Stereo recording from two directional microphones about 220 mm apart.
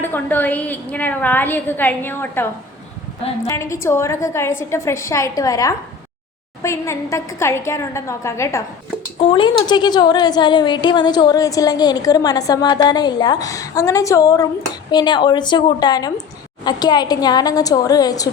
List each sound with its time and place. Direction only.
0.0 s a woman's voice: 10° left (ahead or behind)
9.2 s a woman's voice: 25° left (ahead or behind)